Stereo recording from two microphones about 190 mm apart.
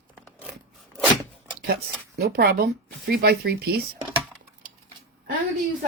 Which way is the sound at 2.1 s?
55° right (ahead or behind).